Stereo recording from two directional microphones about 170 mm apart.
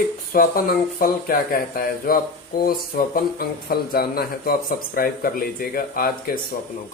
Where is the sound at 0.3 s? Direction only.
60° left (ahead or behind).